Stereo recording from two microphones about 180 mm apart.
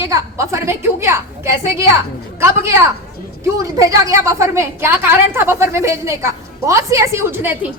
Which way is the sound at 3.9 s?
15° right (ahead or behind).